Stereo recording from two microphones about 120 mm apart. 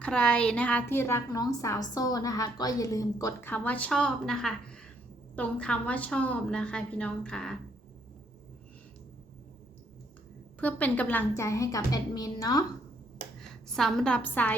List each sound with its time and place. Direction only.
0.0 s a woman's voice: 10° left (ahead or behind)
1.3 s a woman's voice: 30° left (ahead or behind)
3.4 s a woman's voice: 15° left (ahead or behind)
10.6 s a woman's voice: 15° left (ahead or behind); by 12.6 s 30° left (ahead or behind)
13.4 s a woman's voice: 5° left (ahead or behind)